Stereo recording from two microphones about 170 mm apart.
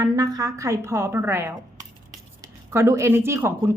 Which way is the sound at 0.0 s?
20° right (ahead or behind).